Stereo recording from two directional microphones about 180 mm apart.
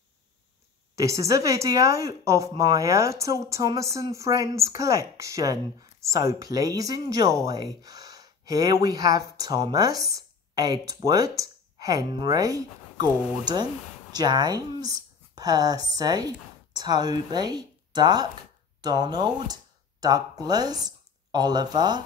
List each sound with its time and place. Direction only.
0.9 s speech: 15° right (ahead or behind)
14.1 s speech: 20° right (ahead or behind)